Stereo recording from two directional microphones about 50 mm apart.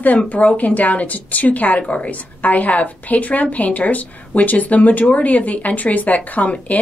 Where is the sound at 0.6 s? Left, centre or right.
Left.